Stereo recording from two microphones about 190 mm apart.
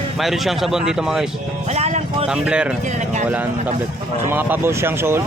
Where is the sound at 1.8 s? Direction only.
35° right (ahead or behind).